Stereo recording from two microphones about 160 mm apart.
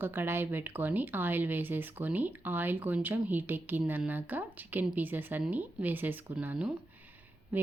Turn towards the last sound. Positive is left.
turn(degrees=-10)  # may be behind; listen again after turning